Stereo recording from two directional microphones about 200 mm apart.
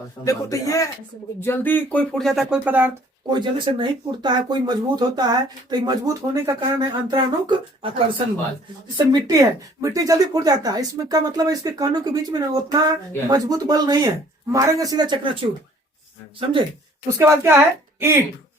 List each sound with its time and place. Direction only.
0.3 s speech: 15° left (ahead or behind); by 2.9 s 10° right (ahead or behind)
3.2 s speech: 20° right (ahead or behind)
16.4 s speech: 25° right (ahead or behind)
17.1 s a woman's voice: 10° right (ahead or behind)